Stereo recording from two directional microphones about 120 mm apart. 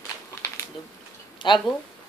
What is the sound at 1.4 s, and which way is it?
Speech, 40° left (ahead or behind).